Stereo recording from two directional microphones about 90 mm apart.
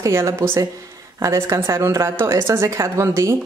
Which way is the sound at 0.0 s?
35° right (ahead or behind).